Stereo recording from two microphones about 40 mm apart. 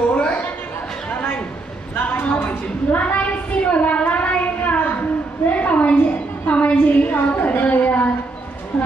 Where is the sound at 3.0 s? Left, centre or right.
Left.